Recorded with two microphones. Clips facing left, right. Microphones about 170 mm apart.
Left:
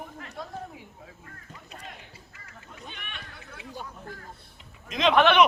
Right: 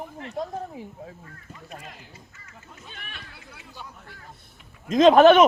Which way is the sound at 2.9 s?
40° right (ahead or behind).